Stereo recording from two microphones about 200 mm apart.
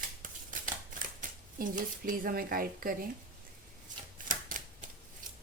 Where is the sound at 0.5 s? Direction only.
40° right (ahead or behind).